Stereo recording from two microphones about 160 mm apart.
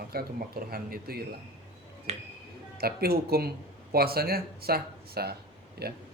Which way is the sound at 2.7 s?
75° right (ahead or behind).